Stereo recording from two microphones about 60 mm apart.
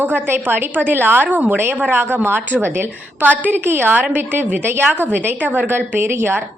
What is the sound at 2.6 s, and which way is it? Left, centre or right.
A woman's voice, right.